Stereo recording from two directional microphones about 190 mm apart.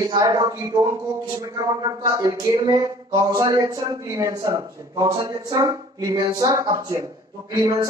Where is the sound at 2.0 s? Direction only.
20° right (ahead or behind).